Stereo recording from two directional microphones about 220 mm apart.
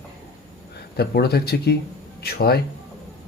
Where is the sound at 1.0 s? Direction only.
45° left (ahead or behind).